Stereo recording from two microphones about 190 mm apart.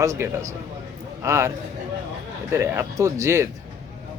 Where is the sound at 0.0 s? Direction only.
15° right (ahead or behind).